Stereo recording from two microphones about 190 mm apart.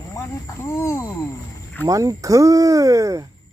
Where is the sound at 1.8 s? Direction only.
15° right (ahead or behind).